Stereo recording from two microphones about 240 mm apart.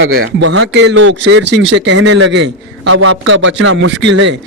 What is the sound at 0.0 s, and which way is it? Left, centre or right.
A man's voice, right.